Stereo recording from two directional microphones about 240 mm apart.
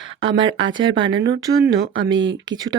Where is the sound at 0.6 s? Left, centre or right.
Centre.